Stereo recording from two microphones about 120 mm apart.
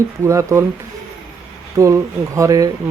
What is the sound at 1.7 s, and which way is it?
Speech, 25° right (ahead or behind).